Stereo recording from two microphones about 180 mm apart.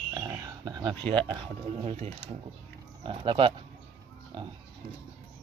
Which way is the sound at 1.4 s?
35° right (ahead or behind).